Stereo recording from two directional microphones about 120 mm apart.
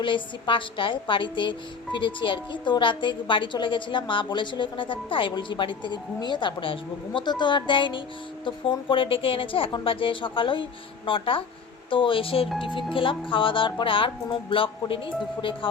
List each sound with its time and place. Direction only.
0.0 s a woman's voice: 45° left (ahead or behind)